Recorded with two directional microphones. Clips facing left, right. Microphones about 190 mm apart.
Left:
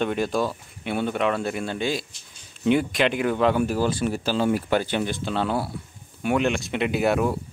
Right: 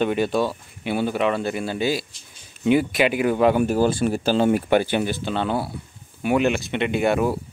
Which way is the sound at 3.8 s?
50° right (ahead or behind).